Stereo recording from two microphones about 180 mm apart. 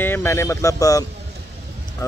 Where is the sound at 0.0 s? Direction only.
15° left (ahead or behind).